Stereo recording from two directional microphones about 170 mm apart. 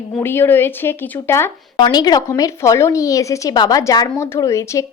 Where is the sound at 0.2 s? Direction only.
15° left (ahead or behind).